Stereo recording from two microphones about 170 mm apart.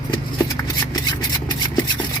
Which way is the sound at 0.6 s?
20° left (ahead or behind).